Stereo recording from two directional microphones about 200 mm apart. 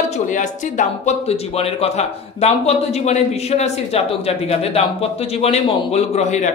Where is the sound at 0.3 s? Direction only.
40° left (ahead or behind).